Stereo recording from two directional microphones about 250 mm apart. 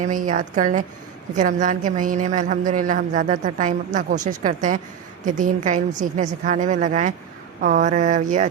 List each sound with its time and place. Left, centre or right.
0.0 s a woman's voice: right